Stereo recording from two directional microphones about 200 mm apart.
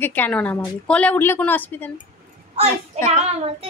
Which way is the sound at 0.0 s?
10° left (ahead or behind).